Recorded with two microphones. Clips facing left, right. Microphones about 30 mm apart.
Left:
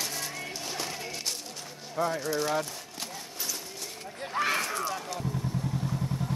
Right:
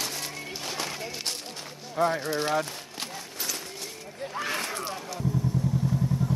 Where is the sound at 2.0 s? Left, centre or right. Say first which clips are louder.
Right 3 dB; right.